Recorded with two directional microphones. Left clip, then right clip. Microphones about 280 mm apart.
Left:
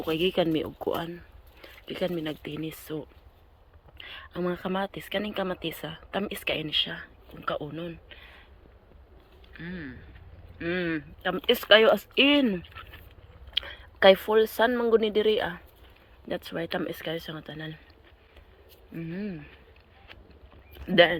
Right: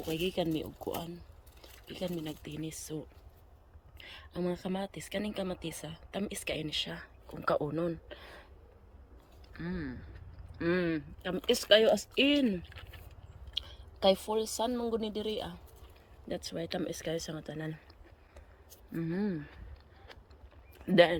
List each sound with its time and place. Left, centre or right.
0.0 s speech: centre
8.1 s a sound: right
9.6 s speech: centre
14.0 s speech: centre
16.3 s speech: centre
18.9 s speech: centre
20.8 s speech: centre